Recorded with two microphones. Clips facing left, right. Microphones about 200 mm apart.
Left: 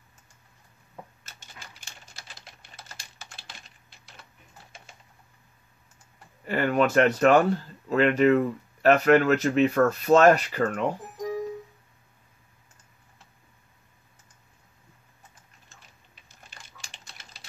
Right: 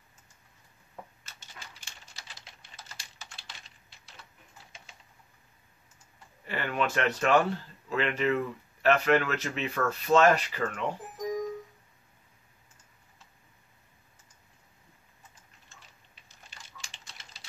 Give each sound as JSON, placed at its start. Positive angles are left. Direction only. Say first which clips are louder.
{"t": 2.7, "sound": "typing", "louder": "left 1 dB", "side_deg": 60}
{"t": 6.4, "sound": "speech", "louder": "left 8 dB", "side_deg": 45}